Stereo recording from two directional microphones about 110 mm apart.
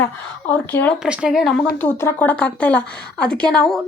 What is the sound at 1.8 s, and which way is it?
Speech, 20° left (ahead or behind).